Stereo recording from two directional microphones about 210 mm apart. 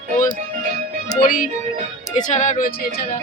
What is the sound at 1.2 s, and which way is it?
Speech, 40° left (ahead or behind).